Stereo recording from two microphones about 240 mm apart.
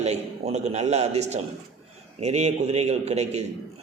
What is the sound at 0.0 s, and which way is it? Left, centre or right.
A man's voice, right.